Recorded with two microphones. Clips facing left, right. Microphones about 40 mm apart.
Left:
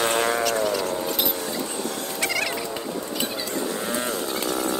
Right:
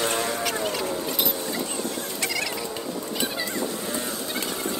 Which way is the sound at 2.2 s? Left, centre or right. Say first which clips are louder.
Left 4 dB; left.